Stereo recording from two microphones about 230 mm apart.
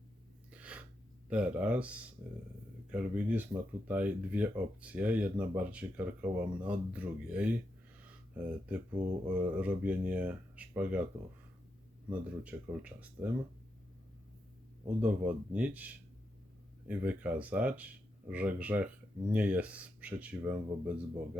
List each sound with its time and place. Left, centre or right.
0.5 s gasp: centre
1.3 s speech: centre
12.1 s speech: centre
14.8 s speech: centre